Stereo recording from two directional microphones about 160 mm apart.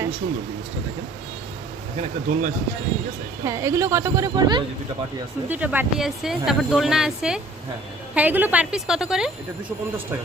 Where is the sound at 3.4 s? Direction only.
20° right (ahead or behind).